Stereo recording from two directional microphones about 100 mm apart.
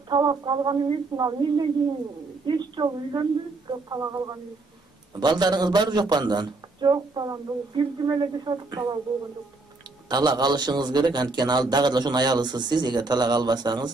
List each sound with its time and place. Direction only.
0.1 s a man's voice: 50° right (ahead or behind)
10.0 s a man's voice: 45° right (ahead or behind)